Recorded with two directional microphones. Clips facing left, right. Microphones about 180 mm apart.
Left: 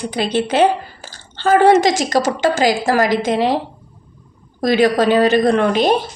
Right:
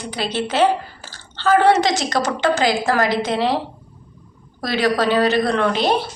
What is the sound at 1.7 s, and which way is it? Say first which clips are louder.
Speech: left 5 dB; 45° left (ahead or behind).